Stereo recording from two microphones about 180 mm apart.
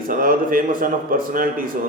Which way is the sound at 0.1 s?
50° right (ahead or behind).